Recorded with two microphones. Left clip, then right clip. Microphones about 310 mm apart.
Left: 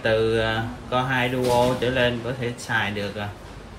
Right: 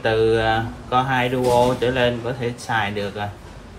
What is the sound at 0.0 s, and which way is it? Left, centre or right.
Speech, centre.